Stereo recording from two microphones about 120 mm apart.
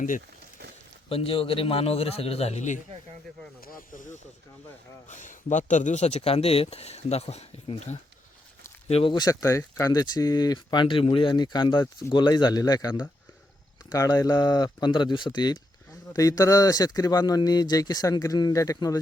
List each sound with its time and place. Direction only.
1.1 s speech: 50° left (ahead or behind); by 2.8 s 80° left
3.9 s speech: 90° left; by 7.9 s 65° left (ahead or behind)
8.9 s speech: 55° left (ahead or behind)
9.1 s speech: 30° left (ahead or behind)